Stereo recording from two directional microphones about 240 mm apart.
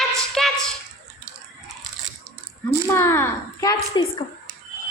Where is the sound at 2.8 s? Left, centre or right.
Centre.